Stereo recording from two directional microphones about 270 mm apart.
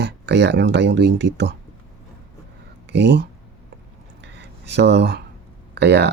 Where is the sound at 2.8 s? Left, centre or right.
Right.